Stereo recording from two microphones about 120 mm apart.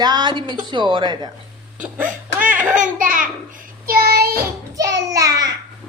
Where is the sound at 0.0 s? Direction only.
35° right (ahead or behind).